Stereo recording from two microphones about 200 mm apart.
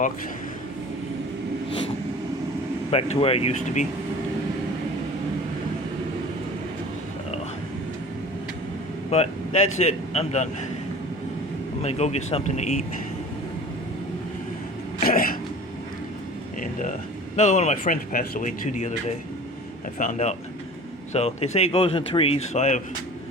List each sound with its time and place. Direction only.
2.9 s speech: 30° left (ahead or behind)
9.0 s speech: 30° left (ahead or behind)
11.8 s speech: 30° left (ahead or behind)
15.0 s throat clearing: 45° left (ahead or behind)
17.3 s speech: 35° left (ahead or behind)
20.0 s speech: 35° left (ahead or behind)